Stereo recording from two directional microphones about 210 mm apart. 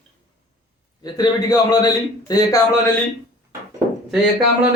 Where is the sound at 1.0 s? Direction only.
20° left (ahead or behind).